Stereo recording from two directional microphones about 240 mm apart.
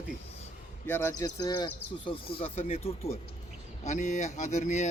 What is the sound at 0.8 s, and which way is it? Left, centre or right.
Speech, centre.